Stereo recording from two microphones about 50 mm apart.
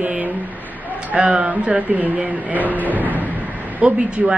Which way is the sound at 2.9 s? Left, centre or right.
Right.